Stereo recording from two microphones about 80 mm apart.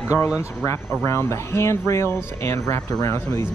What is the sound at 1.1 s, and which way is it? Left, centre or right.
Speech, left.